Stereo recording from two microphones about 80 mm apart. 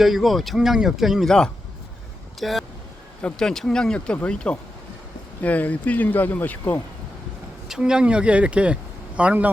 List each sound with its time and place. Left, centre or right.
0.0 s speech: centre
2.4 s speech: centre
3.2 s speech: centre
7.7 s speech: centre